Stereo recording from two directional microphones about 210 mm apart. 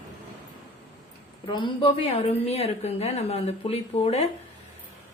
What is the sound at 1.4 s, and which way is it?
A woman's voice, 20° left (ahead or behind).